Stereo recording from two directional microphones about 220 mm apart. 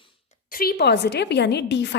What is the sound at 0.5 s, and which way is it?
A woman's voice, 45° left (ahead or behind).